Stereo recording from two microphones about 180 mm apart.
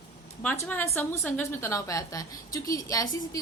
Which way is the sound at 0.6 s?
10° left (ahead or behind).